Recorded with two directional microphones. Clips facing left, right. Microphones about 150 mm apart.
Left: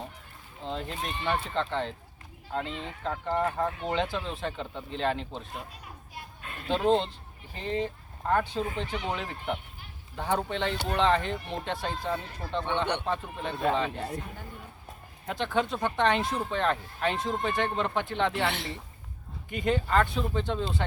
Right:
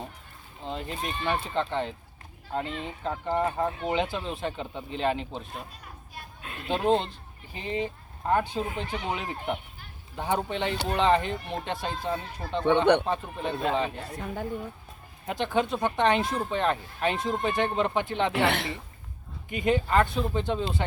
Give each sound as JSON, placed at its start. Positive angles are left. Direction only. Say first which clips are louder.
{"t": 0.6, "sound": "speech", "louder": "right 1 dB", "side_deg": -10}
{"t": 3.8, "sound": "speech", "louder": "right 2 dB", "side_deg": -10}
{"t": 12.8, "sound": "a woman's voice", "louder": "right 9 dB", "side_deg": -55}
{"t": 13.1, "sound": "speech", "louder": "right 2 dB", "side_deg": -10}
{"t": 15.3, "sound": "speech", "louder": "right 2 dB", "side_deg": -10}
{"t": 18.4, "sound": "a woman's voice", "louder": "right 4 dB", "side_deg": -60}
{"t": 19.5, "sound": "speech", "louder": "right 2 dB", "side_deg": -10}